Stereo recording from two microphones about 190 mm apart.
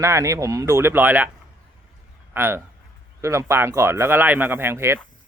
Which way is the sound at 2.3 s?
10° right (ahead or behind).